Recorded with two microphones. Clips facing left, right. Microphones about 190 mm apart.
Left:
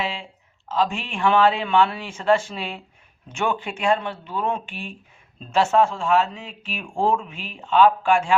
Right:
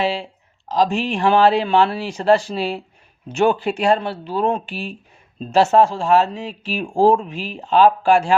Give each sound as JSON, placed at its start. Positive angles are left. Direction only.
{"t": 0.0, "sound": "speech", "side_deg": -35}